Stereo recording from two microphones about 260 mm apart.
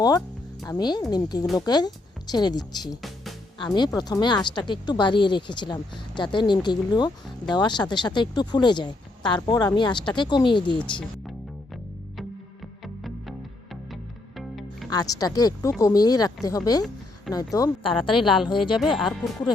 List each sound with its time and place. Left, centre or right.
0.7 s speech: centre
2.9 s music: centre
3.6 s speech: centre
12.8 s music: centre
14.8 s speech: centre
18.8 s speech: centre